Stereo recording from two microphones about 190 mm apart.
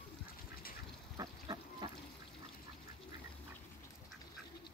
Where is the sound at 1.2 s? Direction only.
20° right (ahead or behind).